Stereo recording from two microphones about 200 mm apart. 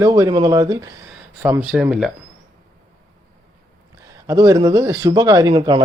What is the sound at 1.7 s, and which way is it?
Speech, 5° right (ahead or behind).